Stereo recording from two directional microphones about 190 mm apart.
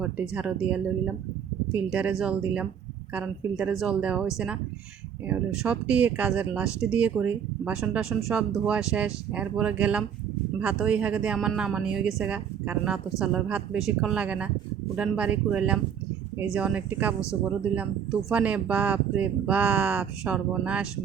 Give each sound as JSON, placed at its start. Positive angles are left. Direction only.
{"t": 0.0, "sound": "a woman's voice", "side_deg": -5}
{"t": 5.3, "sound": "a woman's voice", "side_deg": -5}